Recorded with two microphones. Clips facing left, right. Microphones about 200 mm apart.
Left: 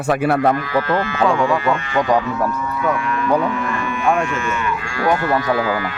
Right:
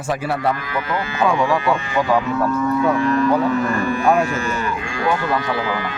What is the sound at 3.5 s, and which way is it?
Speech, 40° right (ahead or behind).